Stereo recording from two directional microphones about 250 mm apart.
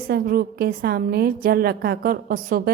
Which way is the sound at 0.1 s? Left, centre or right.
Right.